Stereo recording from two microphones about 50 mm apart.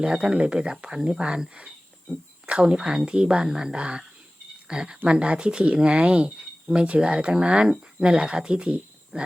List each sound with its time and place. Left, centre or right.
0.0 s speech: centre